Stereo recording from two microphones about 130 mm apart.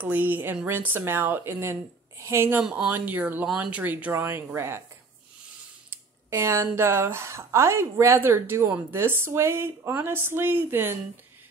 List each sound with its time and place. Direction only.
0.0 s speech: 15° right (ahead or behind)
5.9 s speech: 20° right (ahead or behind)